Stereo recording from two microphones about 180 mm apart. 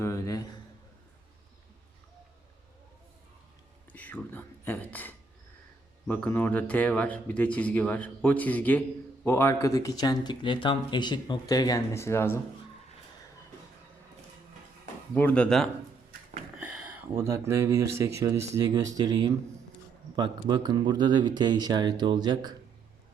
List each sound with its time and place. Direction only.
0.0 s a sound: 15° left (ahead or behind)
3.9 s speech: 10° left (ahead or behind)
15.1 s speech: 10° left (ahead or behind); by 22.5 s 25° right (ahead or behind)